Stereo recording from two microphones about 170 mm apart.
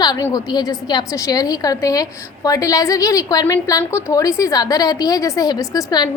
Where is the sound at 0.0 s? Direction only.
25° left (ahead or behind).